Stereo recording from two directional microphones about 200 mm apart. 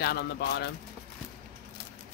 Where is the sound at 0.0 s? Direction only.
55° left (ahead or behind).